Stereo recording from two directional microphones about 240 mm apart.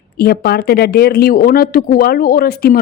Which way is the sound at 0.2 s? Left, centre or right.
Left.